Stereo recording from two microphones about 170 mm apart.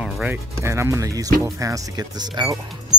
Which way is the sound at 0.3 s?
15° right (ahead or behind).